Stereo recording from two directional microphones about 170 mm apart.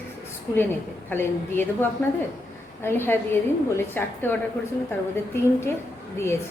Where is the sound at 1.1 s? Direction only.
10° left (ahead or behind).